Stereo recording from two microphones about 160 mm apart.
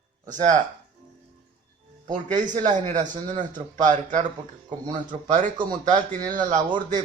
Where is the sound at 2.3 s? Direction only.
50° right (ahead or behind).